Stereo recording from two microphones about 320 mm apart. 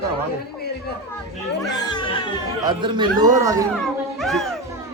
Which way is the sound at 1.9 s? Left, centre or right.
Centre.